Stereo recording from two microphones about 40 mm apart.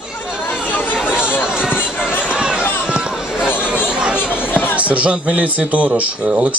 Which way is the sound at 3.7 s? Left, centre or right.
Right.